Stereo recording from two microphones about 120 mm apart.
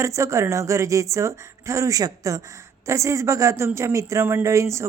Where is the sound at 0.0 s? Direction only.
25° right (ahead or behind).